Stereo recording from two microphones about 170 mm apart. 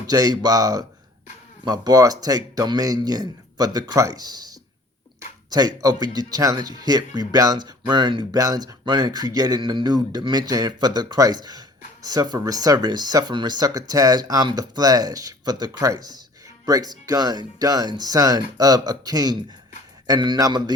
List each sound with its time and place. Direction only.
0.1 s speech: 20° right (ahead or behind)